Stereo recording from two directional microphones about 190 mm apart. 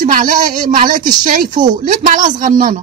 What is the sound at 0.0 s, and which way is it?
A woman's voice, 45° right (ahead or behind).